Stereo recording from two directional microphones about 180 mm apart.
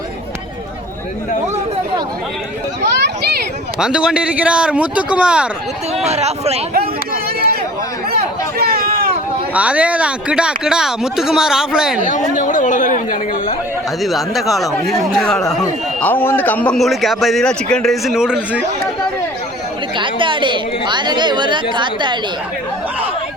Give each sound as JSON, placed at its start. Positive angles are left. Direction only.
{"t": 2.8, "sound": "children playing", "side_deg": -70}
{"t": 3.8, "sound": "a man's voice", "side_deg": -5}
{"t": 6.1, "sound": "speech", "side_deg": -35}
{"t": 6.7, "sound": "a sound", "side_deg": -55}
{"t": 9.6, "sound": "a man's voice", "side_deg": -5}
{"t": 12.4, "sound": "speech", "side_deg": 45}
{"t": 14.0, "sound": "a man's voice", "side_deg": 0}
{"t": 20.0, "sound": "a woman's voice", "side_deg": -25}